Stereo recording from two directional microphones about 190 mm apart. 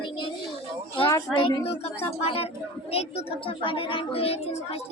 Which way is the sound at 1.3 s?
30° left (ahead or behind).